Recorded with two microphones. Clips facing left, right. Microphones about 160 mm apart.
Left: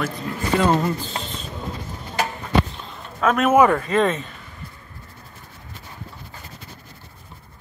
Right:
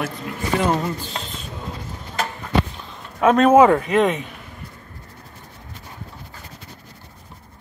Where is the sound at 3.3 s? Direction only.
35° right (ahead or behind).